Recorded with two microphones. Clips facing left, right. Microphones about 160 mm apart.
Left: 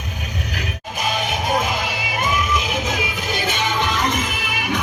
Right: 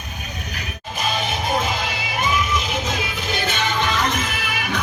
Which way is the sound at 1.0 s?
15° left (ahead or behind).